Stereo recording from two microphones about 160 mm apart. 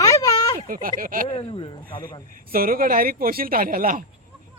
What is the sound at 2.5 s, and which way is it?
Speech, 65° right (ahead or behind).